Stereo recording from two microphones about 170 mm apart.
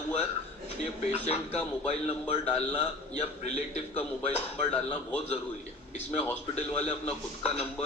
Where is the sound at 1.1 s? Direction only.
40° left (ahead or behind).